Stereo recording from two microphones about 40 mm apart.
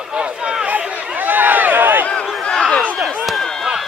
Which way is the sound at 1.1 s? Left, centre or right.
Right.